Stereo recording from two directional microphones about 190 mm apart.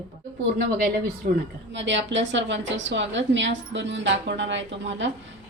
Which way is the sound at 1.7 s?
70° right (ahead or behind).